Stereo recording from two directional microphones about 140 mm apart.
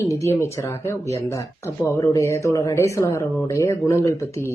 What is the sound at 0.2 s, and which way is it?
Speech, 20° left (ahead or behind).